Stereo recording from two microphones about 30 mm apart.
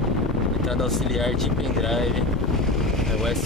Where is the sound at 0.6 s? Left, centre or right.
Centre.